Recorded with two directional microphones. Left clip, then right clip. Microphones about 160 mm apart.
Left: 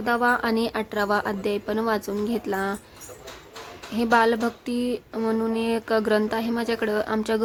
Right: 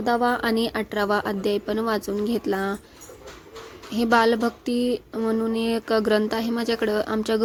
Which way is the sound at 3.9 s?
20° right (ahead or behind).